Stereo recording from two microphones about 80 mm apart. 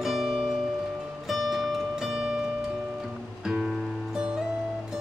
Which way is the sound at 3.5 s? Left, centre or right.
Centre.